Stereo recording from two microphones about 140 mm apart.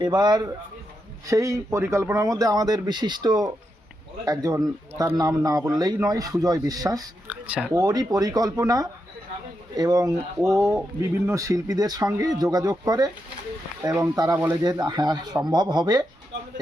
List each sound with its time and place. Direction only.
0.0 s a man's voice: 30° right (ahead or behind)
7.3 s speech: 10° right (ahead or behind)
7.7 s a man's voice: 25° right (ahead or behind)